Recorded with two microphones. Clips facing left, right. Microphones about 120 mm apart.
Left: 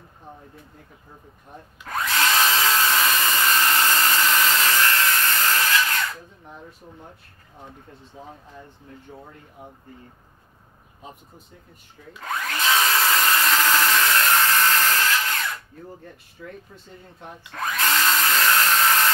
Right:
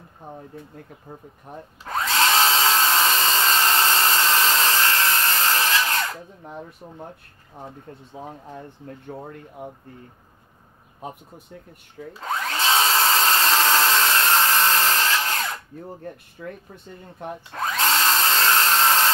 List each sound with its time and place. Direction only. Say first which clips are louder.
1.9 s drill: right 2 dB; 25° right (ahead or behind)
8.5 s speech: right 5 dB; 60° right (ahead or behind)
12.1 s drill: right 2 dB; 30° right (ahead or behind)
16.0 s speech: right 5 dB; 55° right (ahead or behind)
17.5 s drill: right 1 dB; 25° right (ahead or behind)